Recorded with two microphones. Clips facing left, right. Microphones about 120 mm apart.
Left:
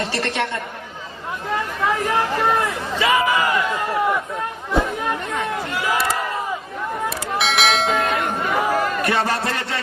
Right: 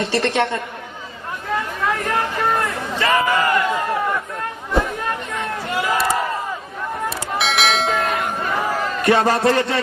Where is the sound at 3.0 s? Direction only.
10° left (ahead or behind).